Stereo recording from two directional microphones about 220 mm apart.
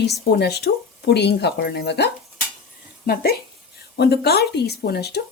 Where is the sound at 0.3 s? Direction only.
45° left (ahead or behind).